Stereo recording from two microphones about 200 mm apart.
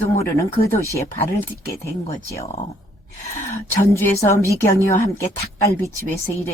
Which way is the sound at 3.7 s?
15° left (ahead or behind).